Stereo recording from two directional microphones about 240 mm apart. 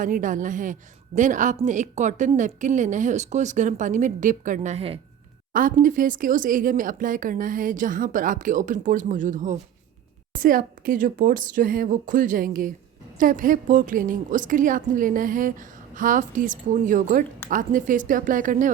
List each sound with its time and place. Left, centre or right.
0.0 s a woman's voice: right